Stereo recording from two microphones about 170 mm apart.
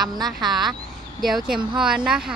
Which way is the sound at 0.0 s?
25° right (ahead or behind).